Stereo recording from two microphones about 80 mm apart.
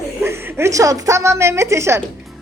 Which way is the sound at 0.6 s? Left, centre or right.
Right.